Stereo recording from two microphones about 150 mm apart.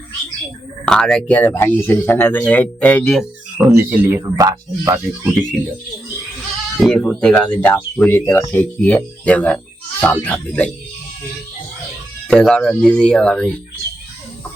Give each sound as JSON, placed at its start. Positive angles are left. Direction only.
{"t": 0.9, "sound": "speech", "side_deg": 5}
{"t": 3.6, "sound": "speech", "side_deg": -15}
{"t": 5.2, "sound": "speech", "side_deg": -10}
{"t": 6.7, "sound": "speech", "side_deg": 0}
{"t": 12.3, "sound": "speech", "side_deg": 5}